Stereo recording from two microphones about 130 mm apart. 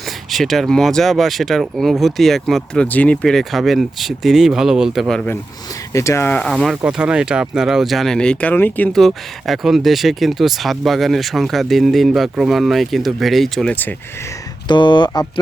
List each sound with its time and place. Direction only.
0.3 s speech: centre (ahead or behind)
5.9 s speech: 25° left (ahead or behind)
6.5 s speech: centre (ahead or behind)
8.9 s speech: centre (ahead or behind)
14.7 s speech: 35° left (ahead or behind)